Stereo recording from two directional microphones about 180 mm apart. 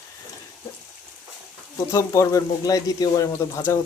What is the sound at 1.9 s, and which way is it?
Speech, 15° left (ahead or behind).